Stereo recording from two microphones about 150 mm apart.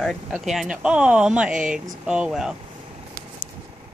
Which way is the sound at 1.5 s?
60° right (ahead or behind).